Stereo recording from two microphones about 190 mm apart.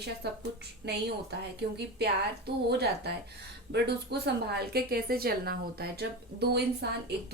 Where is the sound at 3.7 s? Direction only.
60° right (ahead or behind).